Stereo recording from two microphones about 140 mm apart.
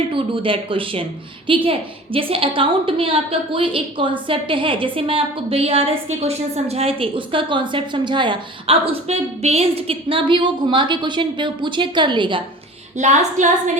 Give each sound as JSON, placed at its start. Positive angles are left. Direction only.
{"t": 0.1, "sound": "a woman's voice", "side_deg": -40}
{"t": 13.0, "sound": "a woman's voice", "side_deg": -60}